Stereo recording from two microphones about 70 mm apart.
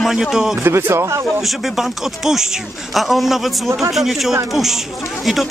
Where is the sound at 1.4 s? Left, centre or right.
Centre.